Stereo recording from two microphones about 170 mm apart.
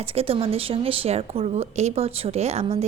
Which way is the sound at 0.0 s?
35° right (ahead or behind).